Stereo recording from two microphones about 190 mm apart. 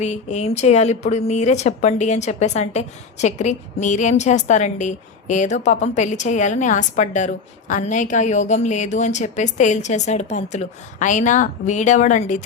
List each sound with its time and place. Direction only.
0.0 s speech: 40° left (ahead or behind)